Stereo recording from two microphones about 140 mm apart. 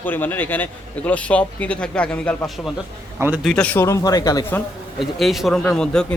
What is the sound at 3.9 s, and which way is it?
Speech, 25° left (ahead or behind).